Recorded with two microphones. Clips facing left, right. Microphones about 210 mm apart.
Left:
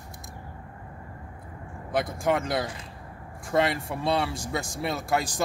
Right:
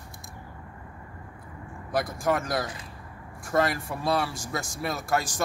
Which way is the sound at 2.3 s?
20° left (ahead or behind).